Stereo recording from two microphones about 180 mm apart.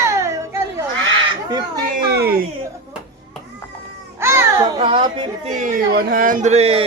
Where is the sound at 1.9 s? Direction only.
65° right (ahead or behind).